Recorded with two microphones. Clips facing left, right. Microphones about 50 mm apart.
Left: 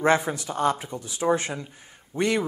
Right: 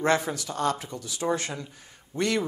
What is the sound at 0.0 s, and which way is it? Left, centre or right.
Speech, left.